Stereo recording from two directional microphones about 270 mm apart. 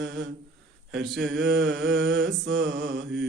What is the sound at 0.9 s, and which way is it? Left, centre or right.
Speech, right.